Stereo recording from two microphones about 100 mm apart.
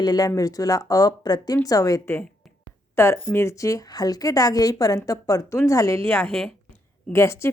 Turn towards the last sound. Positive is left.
turn(degrees=25)  # may be behind; listen again after turning